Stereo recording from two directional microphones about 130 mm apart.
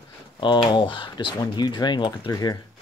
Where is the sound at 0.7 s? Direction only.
40° left (ahead or behind).